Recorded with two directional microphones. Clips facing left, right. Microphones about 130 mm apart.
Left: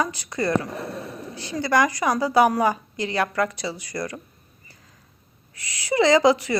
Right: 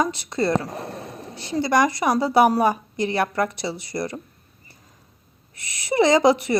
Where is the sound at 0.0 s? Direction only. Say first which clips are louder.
Right 3 dB; 25° right (ahead or behind).